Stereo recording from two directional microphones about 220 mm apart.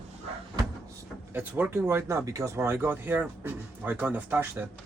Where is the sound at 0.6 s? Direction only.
20° right (ahead or behind).